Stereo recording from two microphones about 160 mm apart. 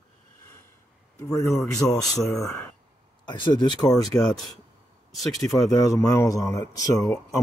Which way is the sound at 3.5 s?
30° left (ahead or behind).